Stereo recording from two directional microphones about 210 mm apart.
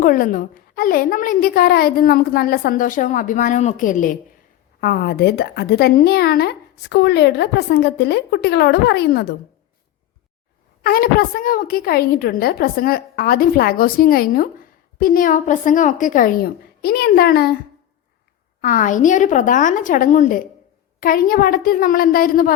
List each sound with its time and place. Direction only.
0.0 s a woman's voice: 40° left (ahead or behind)
10.8 s a woman's voice: 45° left (ahead or behind)
18.6 s a woman's voice: 40° left (ahead or behind)